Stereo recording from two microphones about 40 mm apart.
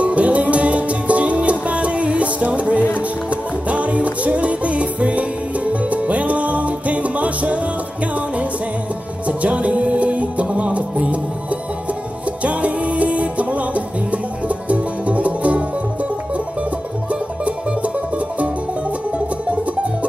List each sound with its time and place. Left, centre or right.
0.0 s music: right
9.4 s music: right
12.4 s music: right
17.1 s music: right